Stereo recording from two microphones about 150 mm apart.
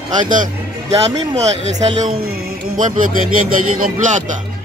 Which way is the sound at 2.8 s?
60° right (ahead or behind).